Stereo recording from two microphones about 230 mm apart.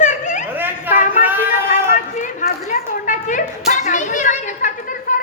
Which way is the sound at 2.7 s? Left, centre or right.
Left.